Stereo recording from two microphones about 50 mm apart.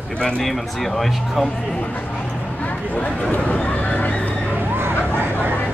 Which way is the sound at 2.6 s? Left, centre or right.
Left.